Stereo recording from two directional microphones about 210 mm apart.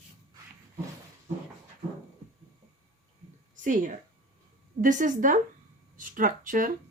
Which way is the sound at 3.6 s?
40° right (ahead or behind).